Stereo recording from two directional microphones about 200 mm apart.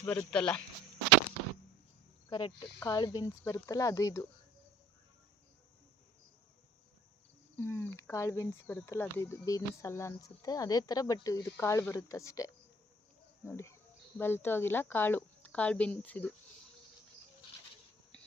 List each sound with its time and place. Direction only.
0.0 s speech: 10° left (ahead or behind)
2.3 s speech: 20° left (ahead or behind)
7.5 s speech: 15° left (ahead or behind)